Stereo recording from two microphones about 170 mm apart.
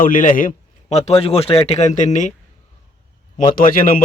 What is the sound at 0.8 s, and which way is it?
Speech, 40° left (ahead or behind).